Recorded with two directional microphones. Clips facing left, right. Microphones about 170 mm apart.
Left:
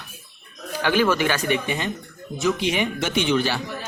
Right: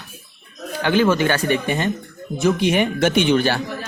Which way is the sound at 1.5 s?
50° right (ahead or behind).